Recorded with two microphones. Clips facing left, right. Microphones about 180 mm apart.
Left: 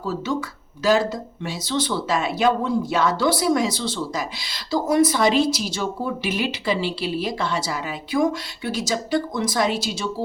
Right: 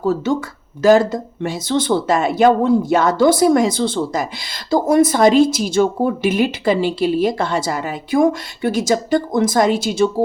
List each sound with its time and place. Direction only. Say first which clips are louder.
0.0 s speech: right 7 dB; 50° right (ahead or behind)